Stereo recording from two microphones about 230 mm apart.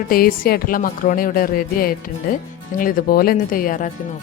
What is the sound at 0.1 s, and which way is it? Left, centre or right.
A woman's voice, left.